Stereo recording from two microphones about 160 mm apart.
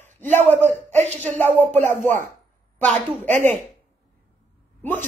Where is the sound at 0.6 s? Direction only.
45° right (ahead or behind).